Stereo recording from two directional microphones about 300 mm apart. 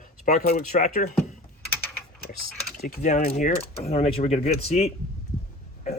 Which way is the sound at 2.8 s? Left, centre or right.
Left.